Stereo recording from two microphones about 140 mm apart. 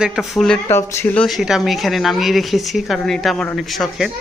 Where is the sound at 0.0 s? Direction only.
Centre (ahead or behind).